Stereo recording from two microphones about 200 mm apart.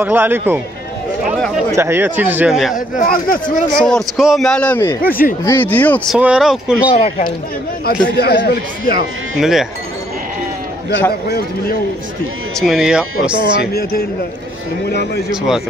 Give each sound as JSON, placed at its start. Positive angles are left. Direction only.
{"t": 0.0, "sound": "speech", "side_deg": -10}
{"t": 1.8, "sound": "speech", "side_deg": -10}
{"t": 2.7, "sound": "speech", "side_deg": 45}
{"t": 3.7, "sound": "speech", "side_deg": 5}
{"t": 5.0, "sound": "speech", "side_deg": 45}
{"t": 5.4, "sound": "speech", "side_deg": 10}
{"t": 6.1, "sound": "speech", "side_deg": -5}
{"t": 7.8, "sound": "speech", "side_deg": 50}
{"t": 9.4, "sound": "speech", "side_deg": 0}
{"t": 11.2, "sound": "speech", "side_deg": 50}
{"t": 12.5, "sound": "speech", "side_deg": -5}
{"t": 13.6, "sound": "speech", "side_deg": 55}